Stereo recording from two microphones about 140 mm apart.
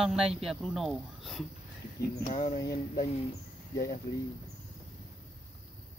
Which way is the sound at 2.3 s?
70° left (ahead or behind).